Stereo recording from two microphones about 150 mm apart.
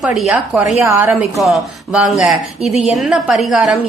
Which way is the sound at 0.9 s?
15° right (ahead or behind).